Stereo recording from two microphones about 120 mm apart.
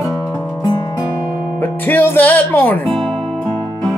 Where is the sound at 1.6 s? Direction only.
15° left (ahead or behind).